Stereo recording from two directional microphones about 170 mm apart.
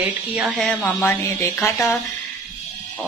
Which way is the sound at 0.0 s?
Centre (ahead or behind).